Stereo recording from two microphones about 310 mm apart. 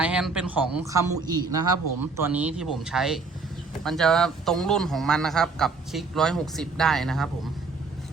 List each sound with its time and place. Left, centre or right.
0.0 s a man's voice: centre
1.5 s speech: right
2.0 s a man's voice: centre